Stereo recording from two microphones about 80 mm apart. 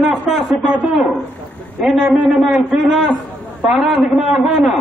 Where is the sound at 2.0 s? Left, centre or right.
Centre.